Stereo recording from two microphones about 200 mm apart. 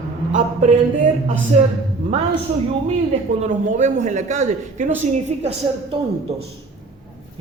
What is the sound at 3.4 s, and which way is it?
A man's voice, 35° right (ahead or behind).